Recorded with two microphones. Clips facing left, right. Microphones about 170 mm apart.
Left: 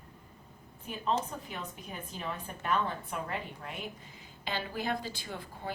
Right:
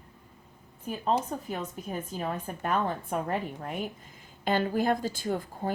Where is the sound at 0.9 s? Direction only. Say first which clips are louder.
Right 4 dB; 45° right (ahead or behind).